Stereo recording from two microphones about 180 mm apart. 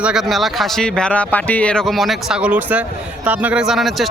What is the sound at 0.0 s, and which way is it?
Speech, 5° right (ahead or behind).